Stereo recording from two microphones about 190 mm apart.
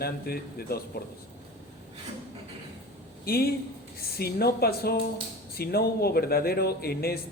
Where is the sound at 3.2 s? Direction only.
50° left (ahead or behind).